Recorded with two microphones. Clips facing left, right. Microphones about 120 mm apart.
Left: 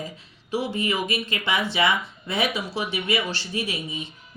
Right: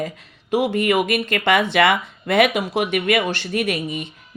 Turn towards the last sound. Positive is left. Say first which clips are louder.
# right 7 dB
turn(degrees=-65)  # may be behind; listen again after turning